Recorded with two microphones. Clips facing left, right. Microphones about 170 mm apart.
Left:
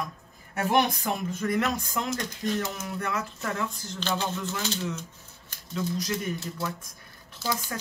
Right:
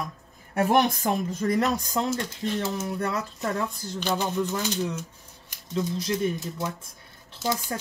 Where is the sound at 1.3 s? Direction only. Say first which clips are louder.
Right 1 dB; 35° right (ahead or behind).